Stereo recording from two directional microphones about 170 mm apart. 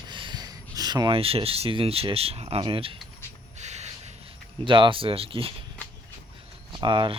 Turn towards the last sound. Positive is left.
turn(degrees=-25)  # may be behind; listen again after turning